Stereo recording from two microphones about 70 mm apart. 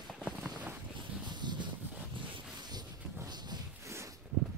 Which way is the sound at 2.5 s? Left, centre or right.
Right.